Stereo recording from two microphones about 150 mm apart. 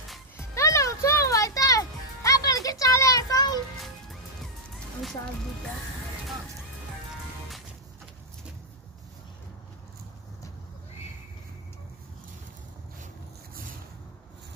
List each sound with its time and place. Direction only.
0.4 s music: 20° left (ahead or behind)